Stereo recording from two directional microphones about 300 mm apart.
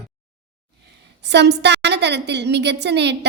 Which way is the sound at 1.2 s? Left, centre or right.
Right.